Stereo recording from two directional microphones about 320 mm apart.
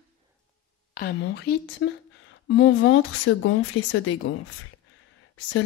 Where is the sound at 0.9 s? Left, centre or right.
Left.